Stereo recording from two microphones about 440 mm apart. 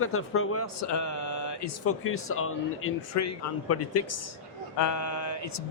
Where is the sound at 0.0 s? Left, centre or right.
Left.